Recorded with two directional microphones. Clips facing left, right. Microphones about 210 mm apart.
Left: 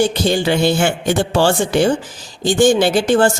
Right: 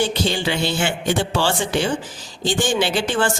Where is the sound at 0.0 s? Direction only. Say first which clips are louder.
Left 5 dB; 45° left (ahead or behind).